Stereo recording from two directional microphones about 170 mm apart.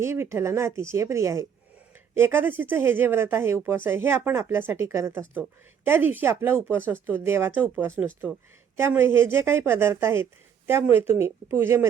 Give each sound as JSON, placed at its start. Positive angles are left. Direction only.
{"t": 0.0, "sound": "speech", "side_deg": -15}
{"t": 11.5, "sound": "speech", "side_deg": -15}